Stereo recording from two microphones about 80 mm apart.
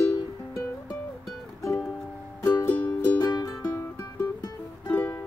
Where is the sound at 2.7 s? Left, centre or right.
Left.